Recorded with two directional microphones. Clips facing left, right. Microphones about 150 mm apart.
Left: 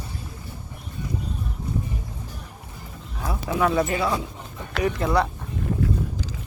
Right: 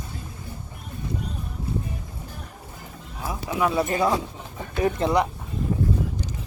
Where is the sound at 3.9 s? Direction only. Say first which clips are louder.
Right 2 dB; 35° right (ahead or behind).